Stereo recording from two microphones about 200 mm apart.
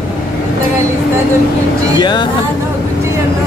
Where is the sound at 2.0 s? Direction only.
20° left (ahead or behind).